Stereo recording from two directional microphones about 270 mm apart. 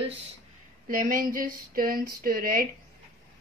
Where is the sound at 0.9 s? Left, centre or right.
Right.